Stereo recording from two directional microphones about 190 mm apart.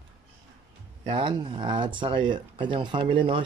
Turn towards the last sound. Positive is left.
turn(degrees=-25)  # may be behind; listen again after turning